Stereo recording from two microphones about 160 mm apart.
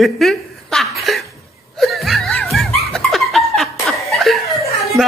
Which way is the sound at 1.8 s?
Centre (ahead or behind).